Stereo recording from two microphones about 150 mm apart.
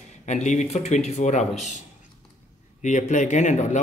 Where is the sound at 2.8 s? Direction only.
55° left (ahead or behind).